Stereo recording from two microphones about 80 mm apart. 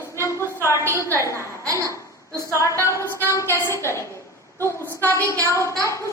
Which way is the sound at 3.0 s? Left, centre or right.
Right.